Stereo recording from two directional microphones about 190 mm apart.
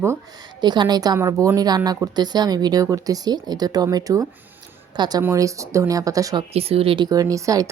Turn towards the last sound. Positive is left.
turn(degrees=-15)  # may be behind; listen again after turning